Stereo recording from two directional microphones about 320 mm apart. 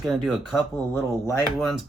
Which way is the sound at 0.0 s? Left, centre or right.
Centre.